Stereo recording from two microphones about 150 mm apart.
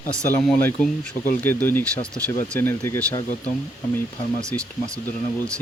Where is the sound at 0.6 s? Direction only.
15° left (ahead or behind).